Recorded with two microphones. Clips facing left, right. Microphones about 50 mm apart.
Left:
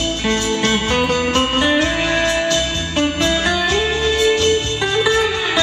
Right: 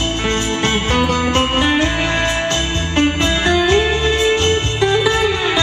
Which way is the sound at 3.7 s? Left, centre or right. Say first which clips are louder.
Right 3 dB; right.